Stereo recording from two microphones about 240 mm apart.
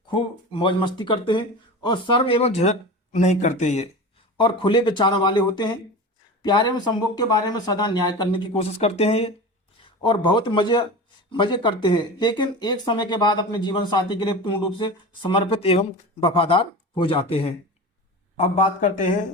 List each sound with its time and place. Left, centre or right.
0.1 s speech: left